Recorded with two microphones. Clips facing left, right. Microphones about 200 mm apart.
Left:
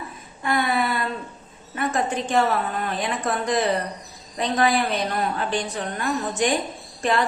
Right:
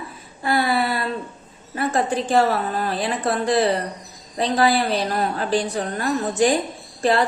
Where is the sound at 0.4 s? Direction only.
35° right (ahead or behind).